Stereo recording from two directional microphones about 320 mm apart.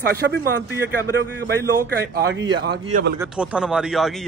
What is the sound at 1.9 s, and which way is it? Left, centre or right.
A man's voice, right.